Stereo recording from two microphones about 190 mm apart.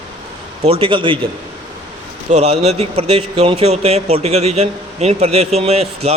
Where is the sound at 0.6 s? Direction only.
30° right (ahead or behind).